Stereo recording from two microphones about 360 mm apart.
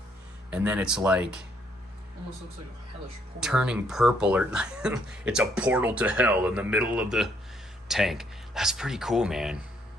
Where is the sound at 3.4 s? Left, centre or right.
Centre.